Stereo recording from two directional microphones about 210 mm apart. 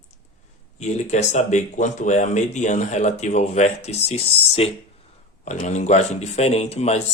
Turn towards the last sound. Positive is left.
turn(degrees=30)  # may be behind; listen again after turning